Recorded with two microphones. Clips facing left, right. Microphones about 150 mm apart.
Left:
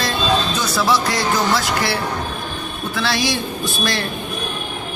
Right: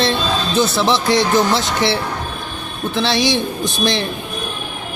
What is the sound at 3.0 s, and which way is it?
Speech, 25° right (ahead or behind).